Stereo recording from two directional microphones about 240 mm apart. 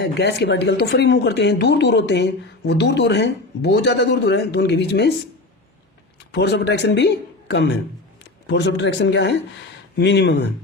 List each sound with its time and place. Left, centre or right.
0.0 s speech: left
6.3 s speech: left